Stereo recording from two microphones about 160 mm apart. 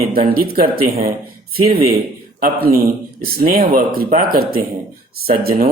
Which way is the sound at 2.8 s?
70° right (ahead or behind).